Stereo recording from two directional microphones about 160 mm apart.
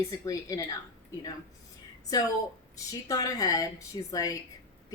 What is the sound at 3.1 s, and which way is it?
Speech, 20° left (ahead or behind).